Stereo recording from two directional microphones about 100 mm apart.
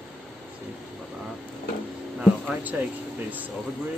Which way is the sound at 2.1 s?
10° right (ahead or behind).